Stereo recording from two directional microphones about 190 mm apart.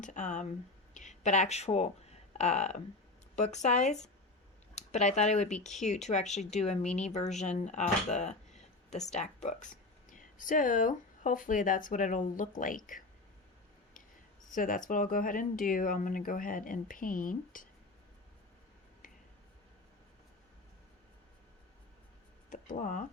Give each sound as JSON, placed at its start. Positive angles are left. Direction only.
{"t": 0.0, "sound": "speech", "side_deg": 40}
{"t": 14.5, "sound": "speech", "side_deg": 45}
{"t": 22.4, "sound": "speech", "side_deg": 40}